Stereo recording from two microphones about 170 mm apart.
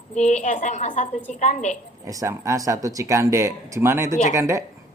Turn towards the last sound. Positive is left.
turn(degrees=-15)  # may be behind; listen again after turning